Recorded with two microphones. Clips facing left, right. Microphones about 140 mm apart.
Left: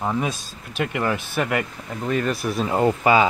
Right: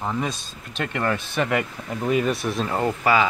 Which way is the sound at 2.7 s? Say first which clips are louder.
Left 4 dB; 15° left (ahead or behind).